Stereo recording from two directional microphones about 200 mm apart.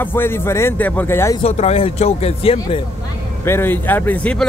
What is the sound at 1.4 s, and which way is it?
Speech, 30° left (ahead or behind).